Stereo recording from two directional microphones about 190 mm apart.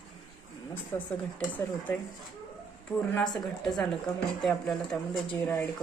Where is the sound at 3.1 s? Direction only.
5° left (ahead or behind).